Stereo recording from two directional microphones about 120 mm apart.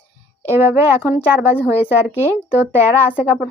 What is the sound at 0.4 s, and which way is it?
A woman's voice, 20° right (ahead or behind).